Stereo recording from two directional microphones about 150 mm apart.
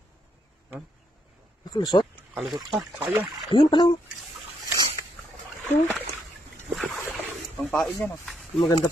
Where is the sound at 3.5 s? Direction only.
35° left (ahead or behind).